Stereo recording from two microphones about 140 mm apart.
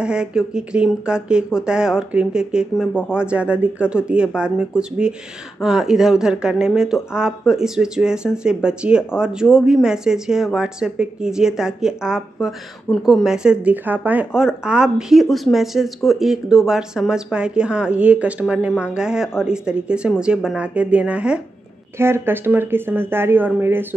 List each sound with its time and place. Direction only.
0.0 s speech: 5° right (ahead or behind)